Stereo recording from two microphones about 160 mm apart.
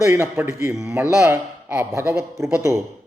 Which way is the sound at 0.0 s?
15° right (ahead or behind).